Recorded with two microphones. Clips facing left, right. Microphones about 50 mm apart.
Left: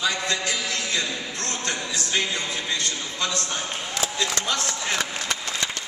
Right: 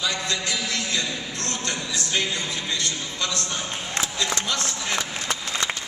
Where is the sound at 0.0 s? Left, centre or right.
Left.